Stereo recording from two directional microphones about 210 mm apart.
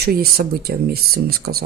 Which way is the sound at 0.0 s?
45° right (ahead or behind).